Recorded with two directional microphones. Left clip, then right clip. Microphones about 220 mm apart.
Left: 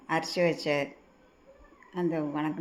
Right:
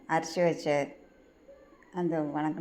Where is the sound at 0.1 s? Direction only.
5° left (ahead or behind).